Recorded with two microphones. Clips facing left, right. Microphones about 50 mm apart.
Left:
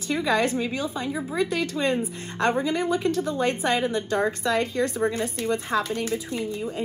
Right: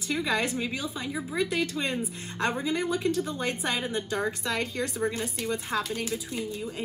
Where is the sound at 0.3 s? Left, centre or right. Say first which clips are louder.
Left 7 dB; left.